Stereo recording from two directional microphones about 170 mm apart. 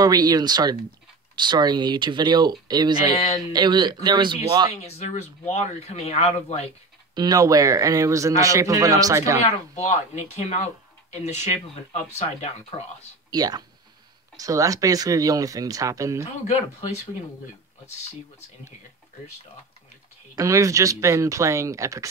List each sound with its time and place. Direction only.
0.0 s speech: 20° right (ahead or behind)
4.8 s speech: 40° left (ahead or behind)
7.2 s speech: 20° right (ahead or behind)
9.4 s speech: 40° left (ahead or behind)
13.3 s speech: 20° right (ahead or behind)
20.3 s speech: 20° right (ahead or behind)